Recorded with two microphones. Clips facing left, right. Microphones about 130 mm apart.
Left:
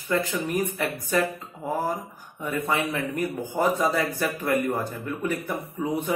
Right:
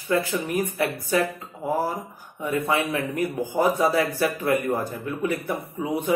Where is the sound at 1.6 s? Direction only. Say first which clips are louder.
Right 2 dB; 10° right (ahead or behind).